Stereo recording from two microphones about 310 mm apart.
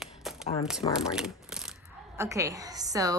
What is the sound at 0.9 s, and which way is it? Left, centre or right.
Speech, centre.